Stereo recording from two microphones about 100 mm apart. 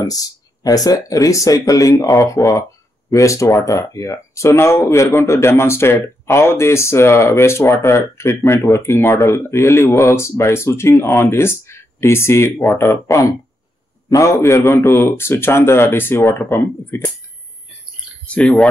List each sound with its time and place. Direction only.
0.0 s speech: 40° left (ahead or behind)
18.2 s speech: 15° left (ahead or behind)